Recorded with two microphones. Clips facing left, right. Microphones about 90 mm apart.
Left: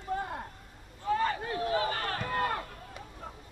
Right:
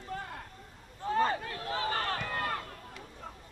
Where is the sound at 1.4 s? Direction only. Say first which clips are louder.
Left 5 dB; 25° left (ahead or behind).